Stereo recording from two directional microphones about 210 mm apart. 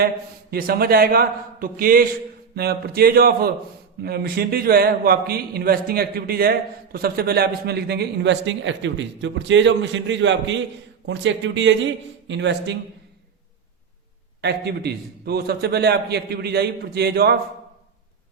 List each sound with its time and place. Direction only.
0.5 s a man's voice: 45° right (ahead or behind)
14.4 s a man's voice: 50° right (ahead or behind)